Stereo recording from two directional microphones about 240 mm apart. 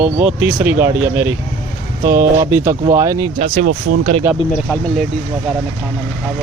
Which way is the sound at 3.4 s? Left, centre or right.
Right.